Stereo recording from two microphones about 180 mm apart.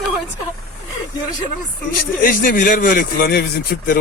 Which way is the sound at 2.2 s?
50° left (ahead or behind).